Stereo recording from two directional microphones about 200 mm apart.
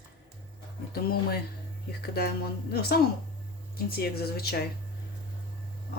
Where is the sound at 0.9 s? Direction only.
50° left (ahead or behind).